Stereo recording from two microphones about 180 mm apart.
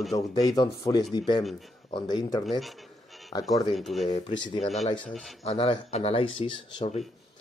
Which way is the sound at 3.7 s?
Centre (ahead or behind).